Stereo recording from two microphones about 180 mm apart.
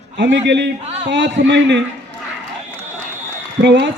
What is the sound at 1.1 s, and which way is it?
Speech, 85° right.